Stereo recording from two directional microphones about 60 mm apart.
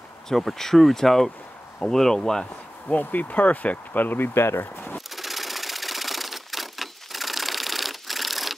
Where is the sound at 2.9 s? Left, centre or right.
Left.